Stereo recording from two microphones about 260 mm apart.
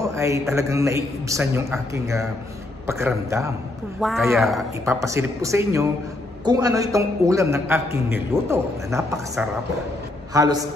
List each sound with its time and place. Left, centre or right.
0.0 s a man's voice: centre
4.0 s speech: centre
4.8 s a man's voice: centre
10.3 s a man's voice: centre